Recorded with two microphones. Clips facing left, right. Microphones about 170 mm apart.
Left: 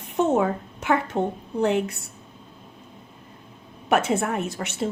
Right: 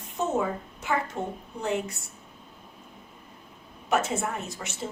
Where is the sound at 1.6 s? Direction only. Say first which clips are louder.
Left 7 dB; 65° left (ahead or behind).